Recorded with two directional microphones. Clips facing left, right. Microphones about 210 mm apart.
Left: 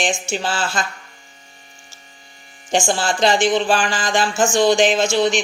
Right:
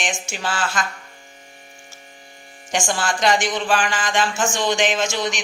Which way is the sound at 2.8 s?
30° left (ahead or behind).